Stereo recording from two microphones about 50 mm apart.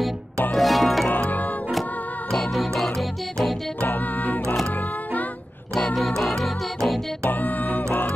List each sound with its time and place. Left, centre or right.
0.6 s music: centre
1.0 s music: left
2.3 s music: centre
3.8 s music: left
5.9 s music: centre
7.2 s music: left